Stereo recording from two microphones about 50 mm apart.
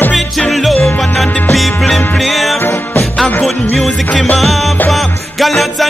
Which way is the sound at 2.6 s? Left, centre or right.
Left.